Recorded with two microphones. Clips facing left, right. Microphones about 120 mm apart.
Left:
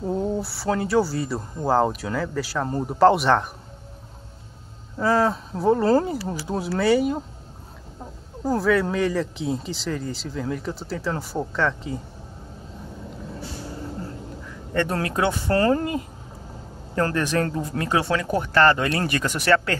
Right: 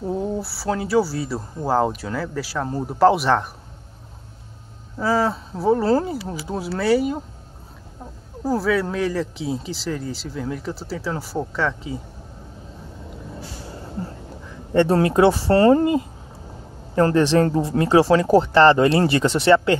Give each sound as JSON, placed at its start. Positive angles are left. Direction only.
{"t": 0.0, "sound": "speech", "side_deg": 0}
{"t": 4.9, "sound": "speech", "side_deg": -5}
{"t": 8.5, "sound": "speech", "side_deg": 0}
{"t": 14.7, "sound": "speech", "side_deg": -25}